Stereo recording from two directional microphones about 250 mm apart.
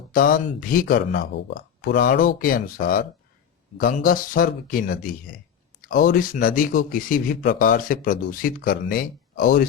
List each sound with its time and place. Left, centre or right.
0.1 s speech: left